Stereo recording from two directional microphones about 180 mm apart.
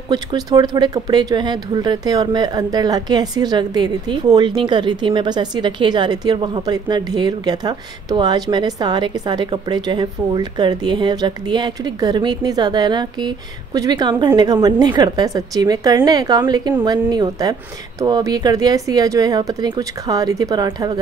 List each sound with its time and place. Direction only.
0.1 s speech: 25° right (ahead or behind)